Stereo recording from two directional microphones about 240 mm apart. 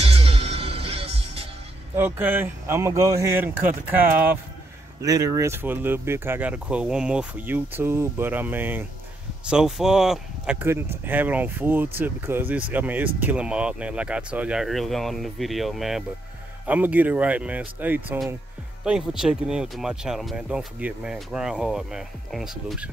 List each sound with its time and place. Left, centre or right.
0.0 s music: right
2.0 s speech: centre